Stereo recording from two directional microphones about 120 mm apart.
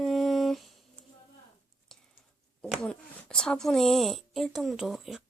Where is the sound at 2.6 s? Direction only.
5° left (ahead or behind).